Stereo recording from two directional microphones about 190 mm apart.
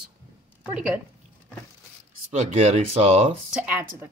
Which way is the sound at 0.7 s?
5° right (ahead or behind).